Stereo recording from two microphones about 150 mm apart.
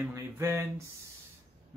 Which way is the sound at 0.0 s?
20° right (ahead or behind).